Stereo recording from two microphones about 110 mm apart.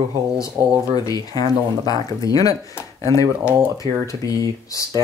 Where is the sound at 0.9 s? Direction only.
35° left (ahead or behind).